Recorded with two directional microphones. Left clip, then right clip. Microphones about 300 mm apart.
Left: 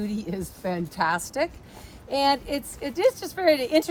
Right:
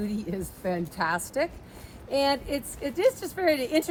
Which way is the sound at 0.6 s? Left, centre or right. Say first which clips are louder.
Left 3 dB; centre.